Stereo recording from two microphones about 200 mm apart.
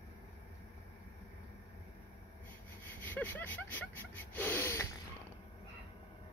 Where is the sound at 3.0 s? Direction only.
10° left (ahead or behind).